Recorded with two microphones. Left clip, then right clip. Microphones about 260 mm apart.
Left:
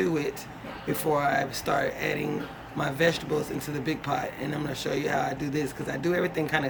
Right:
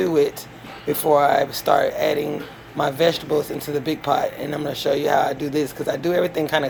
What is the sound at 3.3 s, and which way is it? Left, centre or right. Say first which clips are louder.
Speech: right 8 dB; left.